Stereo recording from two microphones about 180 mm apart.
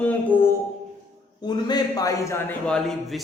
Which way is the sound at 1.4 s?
25° left (ahead or behind).